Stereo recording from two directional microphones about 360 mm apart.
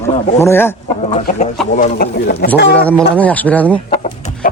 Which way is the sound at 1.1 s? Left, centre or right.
Centre.